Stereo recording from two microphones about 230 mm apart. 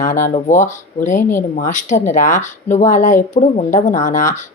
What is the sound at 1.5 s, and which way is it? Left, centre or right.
Speech, left.